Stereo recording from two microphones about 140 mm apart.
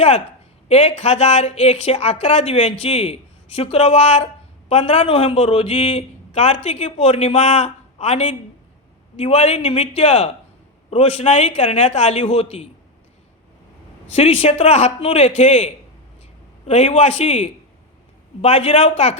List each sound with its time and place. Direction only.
0.7 s a man's voice: 55° left (ahead or behind)
14.1 s a man's voice: 40° left (ahead or behind)
18.4 s a man's voice: 45° left (ahead or behind)